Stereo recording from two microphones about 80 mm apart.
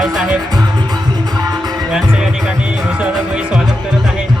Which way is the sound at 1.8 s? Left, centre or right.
Centre.